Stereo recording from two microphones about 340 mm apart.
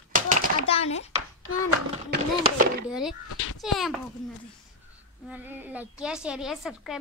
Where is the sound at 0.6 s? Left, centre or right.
Centre.